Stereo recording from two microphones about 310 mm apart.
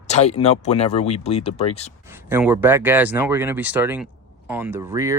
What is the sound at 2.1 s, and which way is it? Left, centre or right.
Speech, centre.